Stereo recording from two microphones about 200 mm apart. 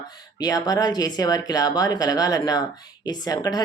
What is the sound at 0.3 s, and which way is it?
Speech, 20° left (ahead or behind).